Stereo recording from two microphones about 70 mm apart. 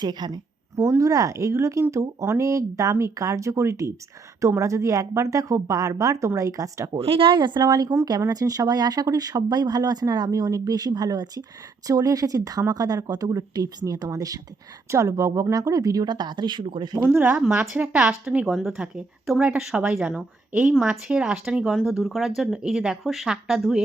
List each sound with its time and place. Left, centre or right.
0.0 s a woman's voice: right
0.9 s a woman's voice: right
2.4 s a woman's voice: right
6.9 s speech: right
8.3 s speech: right
14.8 s speech: right
17.2 s a woman's voice: centre
17.9 s speech: centre